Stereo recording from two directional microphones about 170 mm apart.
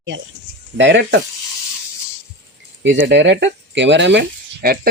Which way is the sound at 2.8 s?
90° right.